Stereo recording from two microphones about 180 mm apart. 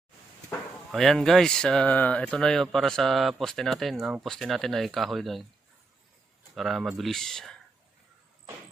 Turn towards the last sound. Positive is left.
turn(degrees=0)  # may be behind; listen again after turning